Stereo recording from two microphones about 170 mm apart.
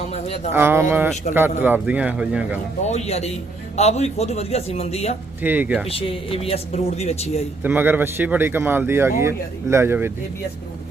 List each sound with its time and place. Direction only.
0.1 s a sound: 40° left (ahead or behind)
0.5 s speech: 15° right (ahead or behind)
2.8 s speech: 40° left (ahead or behind)
5.4 s speech: 10° right (ahead or behind)
5.9 s speech: 35° left (ahead or behind)
7.6 s speech: 10° right (ahead or behind)